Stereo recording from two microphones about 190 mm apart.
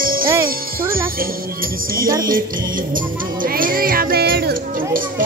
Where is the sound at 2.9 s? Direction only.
45° right (ahead or behind).